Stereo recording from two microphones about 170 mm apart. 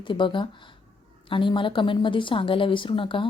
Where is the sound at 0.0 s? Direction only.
30° left (ahead or behind).